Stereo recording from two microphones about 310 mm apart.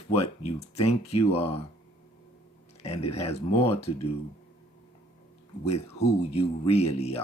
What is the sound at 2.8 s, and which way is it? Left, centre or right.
Speech, centre.